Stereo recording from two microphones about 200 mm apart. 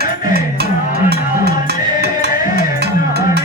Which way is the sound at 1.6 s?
55° right (ahead or behind).